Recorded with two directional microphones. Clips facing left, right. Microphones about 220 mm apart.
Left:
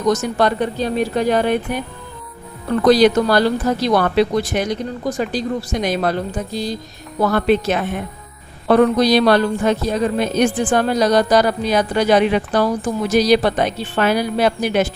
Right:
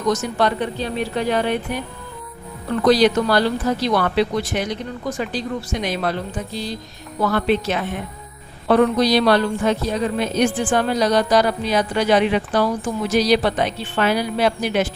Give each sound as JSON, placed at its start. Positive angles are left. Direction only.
{"t": 0.1, "sound": "speech", "side_deg": 45}
{"t": 2.8, "sound": "speech", "side_deg": 45}